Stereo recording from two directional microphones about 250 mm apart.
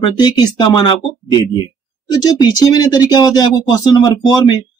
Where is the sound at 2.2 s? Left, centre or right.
Centre.